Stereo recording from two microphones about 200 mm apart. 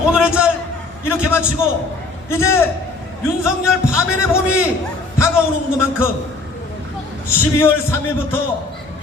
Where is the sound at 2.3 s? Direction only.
15° left (ahead or behind).